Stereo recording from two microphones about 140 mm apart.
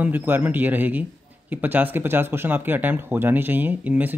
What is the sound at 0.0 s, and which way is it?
Speech, 15° right (ahead or behind).